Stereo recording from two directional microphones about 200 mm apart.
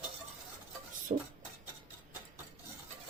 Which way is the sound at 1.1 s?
40° right (ahead or behind).